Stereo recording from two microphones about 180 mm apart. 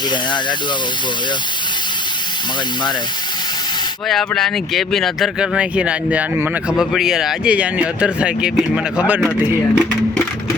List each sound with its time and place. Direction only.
4.1 s speech: centre (ahead or behind)